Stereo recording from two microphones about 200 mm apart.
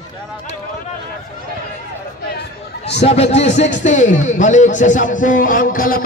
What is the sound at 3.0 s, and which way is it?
A man's voice, 30° left (ahead or behind).